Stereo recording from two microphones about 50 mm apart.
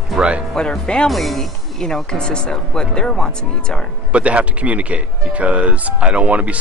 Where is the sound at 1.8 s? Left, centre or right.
Centre.